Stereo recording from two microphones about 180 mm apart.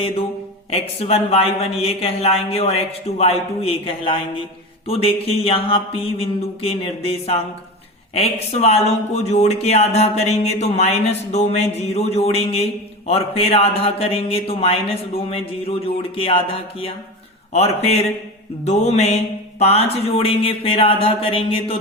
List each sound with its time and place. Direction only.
0.7 s speech: 35° left (ahead or behind)